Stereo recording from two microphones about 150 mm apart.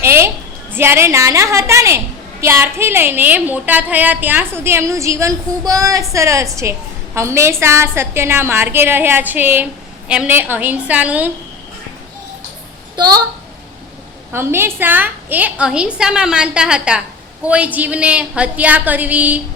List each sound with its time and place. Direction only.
0.0 s a sound: 15° right (ahead or behind)
0.7 s a woman's voice: 15° right (ahead or behind)
13.0 s a woman's voice: 25° right (ahead or behind)
14.3 s a woman's voice: 15° right (ahead or behind)